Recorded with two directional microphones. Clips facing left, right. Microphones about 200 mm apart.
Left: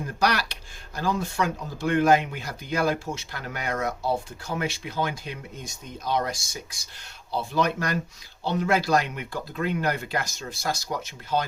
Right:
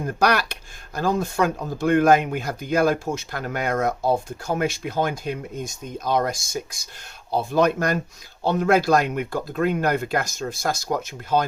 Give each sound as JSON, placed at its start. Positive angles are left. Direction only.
{"t": 0.0, "sound": "speech", "side_deg": -50}